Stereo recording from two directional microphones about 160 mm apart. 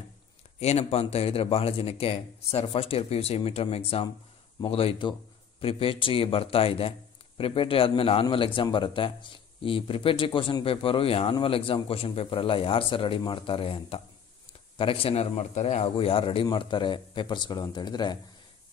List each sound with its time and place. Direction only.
0.6 s a man's voice: 40° left (ahead or behind)